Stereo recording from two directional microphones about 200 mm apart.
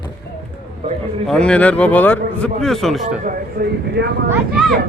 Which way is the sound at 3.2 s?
50° right (ahead or behind).